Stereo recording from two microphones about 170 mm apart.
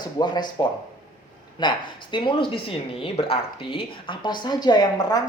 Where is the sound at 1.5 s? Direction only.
25° left (ahead or behind).